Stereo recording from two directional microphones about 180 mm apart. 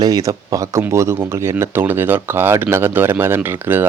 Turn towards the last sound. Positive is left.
turn(degrees=-10)  # may be behind; listen again after turning